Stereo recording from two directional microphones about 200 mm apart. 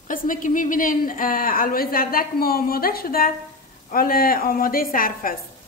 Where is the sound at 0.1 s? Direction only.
40° left (ahead or behind).